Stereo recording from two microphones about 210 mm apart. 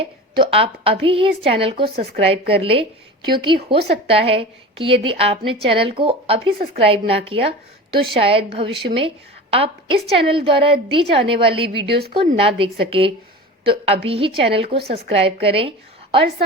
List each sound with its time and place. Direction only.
0.0 s a woman's voice: 25° right (ahead or behind)
11.9 s a woman's voice: 50° right (ahead or behind)
12.4 s a woman's voice: 25° right (ahead or behind)